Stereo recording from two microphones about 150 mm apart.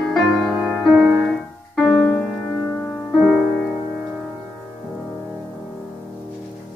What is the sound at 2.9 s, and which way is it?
Music, 5° left (ahead or behind).